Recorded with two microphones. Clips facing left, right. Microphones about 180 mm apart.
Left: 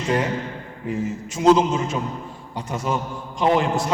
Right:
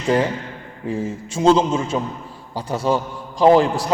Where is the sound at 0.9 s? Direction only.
30° right (ahead or behind).